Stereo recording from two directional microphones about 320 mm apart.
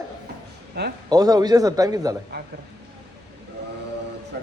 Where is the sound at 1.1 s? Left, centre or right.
Centre.